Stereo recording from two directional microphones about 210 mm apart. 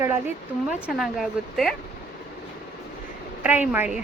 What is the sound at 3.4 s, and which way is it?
Speech, 5° right (ahead or behind).